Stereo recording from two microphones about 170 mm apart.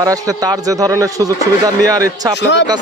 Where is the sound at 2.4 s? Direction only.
90° left.